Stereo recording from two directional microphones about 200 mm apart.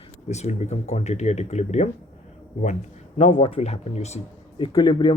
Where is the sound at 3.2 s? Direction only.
30° left (ahead or behind).